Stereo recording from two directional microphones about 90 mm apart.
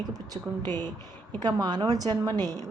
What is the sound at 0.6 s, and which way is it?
A woman's voice, 50° right (ahead or behind).